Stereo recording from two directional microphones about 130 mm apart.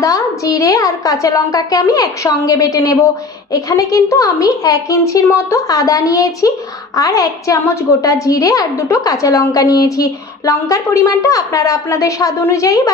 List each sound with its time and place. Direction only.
0.0 s a woman's voice: 25° left (ahead or behind)